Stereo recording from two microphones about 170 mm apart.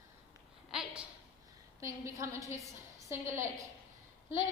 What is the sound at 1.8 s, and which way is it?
A woman's voice, 20° right (ahead or behind).